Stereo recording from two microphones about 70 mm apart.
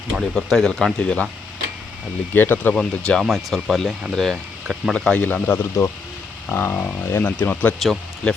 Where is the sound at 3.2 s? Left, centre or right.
Centre.